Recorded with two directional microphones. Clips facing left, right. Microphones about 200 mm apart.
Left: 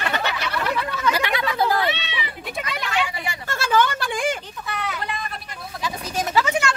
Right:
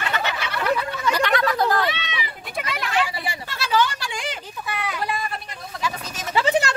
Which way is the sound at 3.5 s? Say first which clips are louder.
Left 2 dB; 50° left (ahead or behind).